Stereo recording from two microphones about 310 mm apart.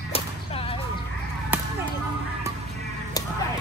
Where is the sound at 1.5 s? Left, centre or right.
Centre.